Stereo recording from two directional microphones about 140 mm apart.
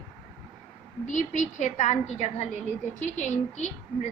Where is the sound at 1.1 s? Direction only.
60° left (ahead or behind).